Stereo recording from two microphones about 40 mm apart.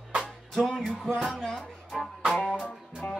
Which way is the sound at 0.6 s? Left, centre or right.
Centre.